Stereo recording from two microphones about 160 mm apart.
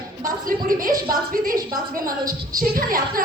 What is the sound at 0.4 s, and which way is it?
Speech, 60° right (ahead or behind).